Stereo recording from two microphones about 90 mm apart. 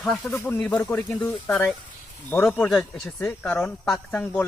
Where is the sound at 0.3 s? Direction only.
25° left (ahead or behind).